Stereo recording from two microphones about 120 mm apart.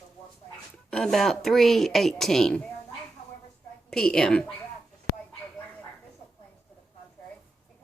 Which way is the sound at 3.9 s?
5° left (ahead or behind).